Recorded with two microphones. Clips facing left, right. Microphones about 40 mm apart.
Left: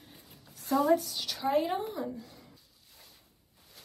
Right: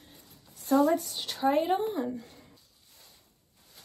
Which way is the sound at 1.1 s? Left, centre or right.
Right.